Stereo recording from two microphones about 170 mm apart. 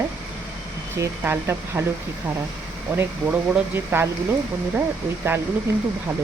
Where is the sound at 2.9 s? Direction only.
10° right (ahead or behind).